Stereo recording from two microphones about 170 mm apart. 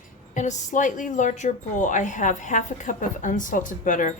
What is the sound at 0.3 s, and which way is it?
Speech, 45° left (ahead or behind).